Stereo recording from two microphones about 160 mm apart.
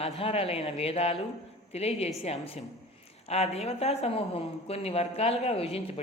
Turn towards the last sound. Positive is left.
turn(degrees=40)  # may be behind; listen again after turning